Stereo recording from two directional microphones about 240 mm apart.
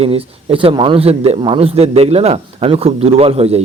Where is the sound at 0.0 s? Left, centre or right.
Right.